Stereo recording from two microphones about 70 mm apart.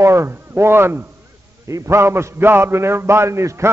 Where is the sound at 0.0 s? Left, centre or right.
Right.